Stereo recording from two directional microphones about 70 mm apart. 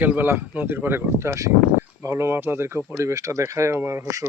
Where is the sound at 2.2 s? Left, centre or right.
Right.